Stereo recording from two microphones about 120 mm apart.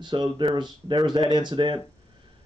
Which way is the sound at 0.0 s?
40° right (ahead or behind).